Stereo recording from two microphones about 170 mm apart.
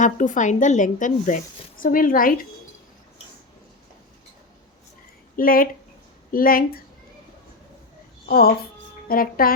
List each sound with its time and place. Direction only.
0.0 s speech: 45° left (ahead or behind)
5.4 s speech: 60° left (ahead or behind)
9.0 s speech: 60° left (ahead or behind)